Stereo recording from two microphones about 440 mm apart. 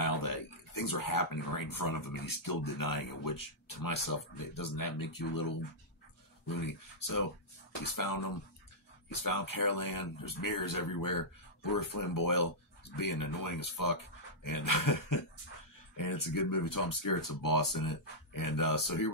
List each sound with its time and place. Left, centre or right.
0.0 s speech: left
6.6 s speech: left